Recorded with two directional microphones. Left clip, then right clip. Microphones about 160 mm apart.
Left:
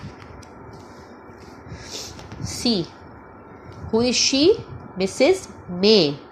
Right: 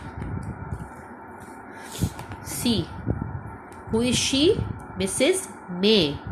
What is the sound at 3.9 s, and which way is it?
A woman's voice, 20° left (ahead or behind).